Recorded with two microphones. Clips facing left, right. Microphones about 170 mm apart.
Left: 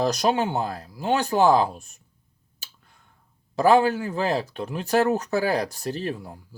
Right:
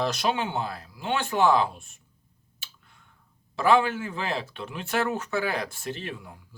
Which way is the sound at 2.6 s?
40° left (ahead or behind).